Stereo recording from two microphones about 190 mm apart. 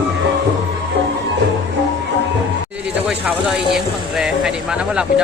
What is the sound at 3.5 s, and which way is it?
Speech, centre (ahead or behind).